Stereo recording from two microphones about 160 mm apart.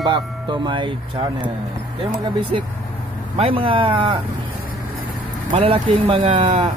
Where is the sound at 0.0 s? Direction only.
30° right (ahead or behind).